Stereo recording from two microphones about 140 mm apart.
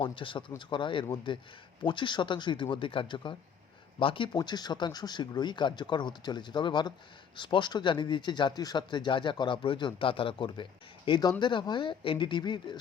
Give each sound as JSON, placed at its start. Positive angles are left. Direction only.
{"t": 0.0, "sound": "speech", "side_deg": 35}